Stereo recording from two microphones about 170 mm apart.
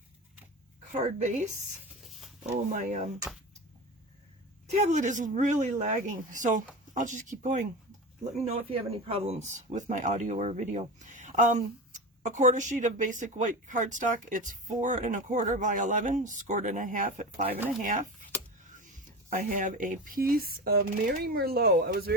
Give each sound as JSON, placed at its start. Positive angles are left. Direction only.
{"t": 0.9, "sound": "speech", "side_deg": -45}
{"t": 2.0, "sound": "a sound", "side_deg": 0}
{"t": 4.7, "sound": "speech", "side_deg": -40}
{"t": 17.6, "sound": "speech", "side_deg": 0}
{"t": 17.8, "sound": "speech", "side_deg": -50}